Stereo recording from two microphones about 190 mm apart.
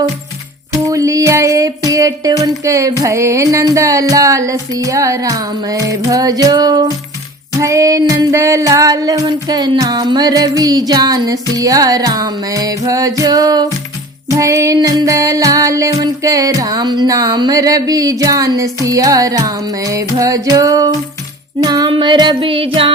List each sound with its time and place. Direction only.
0.7 s music: 15° right (ahead or behind)